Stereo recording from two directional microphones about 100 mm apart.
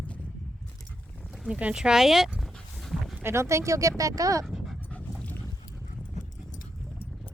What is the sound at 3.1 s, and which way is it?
Speech, 25° right (ahead or behind).